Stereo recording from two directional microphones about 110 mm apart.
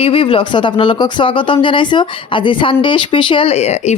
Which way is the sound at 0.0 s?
55° left (ahead or behind).